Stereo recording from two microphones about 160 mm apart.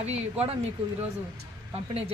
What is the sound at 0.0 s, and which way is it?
Speech, 40° right (ahead or behind).